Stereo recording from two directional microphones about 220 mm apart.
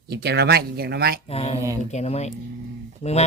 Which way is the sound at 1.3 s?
25° left (ahead or behind).